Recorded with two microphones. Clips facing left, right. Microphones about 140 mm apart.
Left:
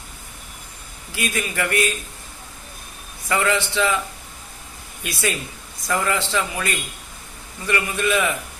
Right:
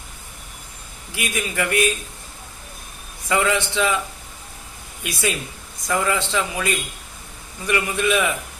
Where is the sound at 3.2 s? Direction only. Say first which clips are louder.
Right 1 dB; 20° right (ahead or behind).